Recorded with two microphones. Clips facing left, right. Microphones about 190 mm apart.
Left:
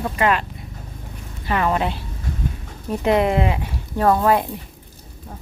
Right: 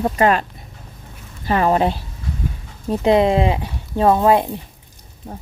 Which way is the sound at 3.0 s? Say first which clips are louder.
Right 3 dB; 25° right (ahead or behind).